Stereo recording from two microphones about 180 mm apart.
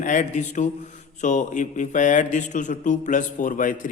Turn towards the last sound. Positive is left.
turn(degrees=45)  # may be behind; listen again after turning